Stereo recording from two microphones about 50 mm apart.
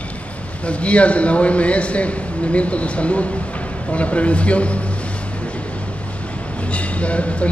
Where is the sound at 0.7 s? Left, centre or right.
Left.